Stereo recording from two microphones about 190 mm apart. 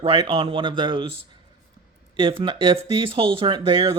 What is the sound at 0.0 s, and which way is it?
Speech, 30° right (ahead or behind).